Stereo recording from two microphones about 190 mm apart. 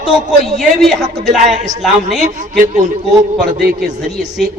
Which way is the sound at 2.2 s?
40° right (ahead or behind).